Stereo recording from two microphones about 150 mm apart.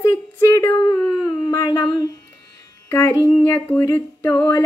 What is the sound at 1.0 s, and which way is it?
Howl, 20° left (ahead or behind).